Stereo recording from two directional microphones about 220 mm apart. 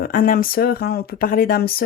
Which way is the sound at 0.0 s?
40° left (ahead or behind).